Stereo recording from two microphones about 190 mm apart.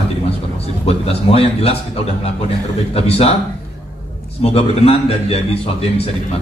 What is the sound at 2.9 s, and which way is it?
Speech, 30° left (ahead or behind).